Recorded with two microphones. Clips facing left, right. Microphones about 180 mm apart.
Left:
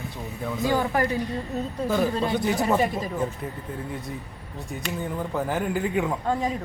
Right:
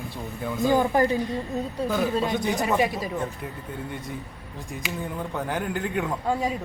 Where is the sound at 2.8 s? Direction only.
10° right (ahead or behind).